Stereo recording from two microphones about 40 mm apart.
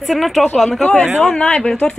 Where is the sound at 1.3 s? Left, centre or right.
Left.